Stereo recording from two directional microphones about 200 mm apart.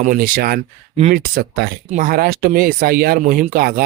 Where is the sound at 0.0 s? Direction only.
40° right (ahead or behind).